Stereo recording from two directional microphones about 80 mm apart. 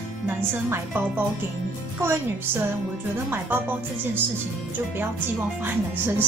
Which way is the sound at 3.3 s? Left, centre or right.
Right.